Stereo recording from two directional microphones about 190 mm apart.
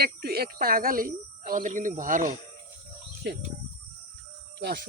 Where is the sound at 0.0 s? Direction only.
55° right (ahead or behind).